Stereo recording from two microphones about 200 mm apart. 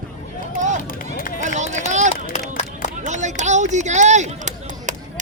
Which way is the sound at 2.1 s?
45° left (ahead or behind).